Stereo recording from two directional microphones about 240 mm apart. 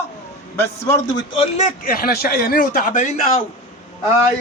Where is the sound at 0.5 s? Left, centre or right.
Centre; by 3.4 s left.